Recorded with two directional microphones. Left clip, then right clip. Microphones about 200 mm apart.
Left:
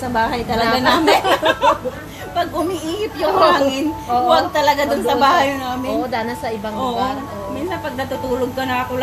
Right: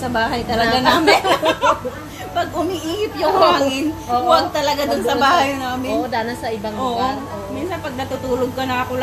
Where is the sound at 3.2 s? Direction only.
10° left (ahead or behind).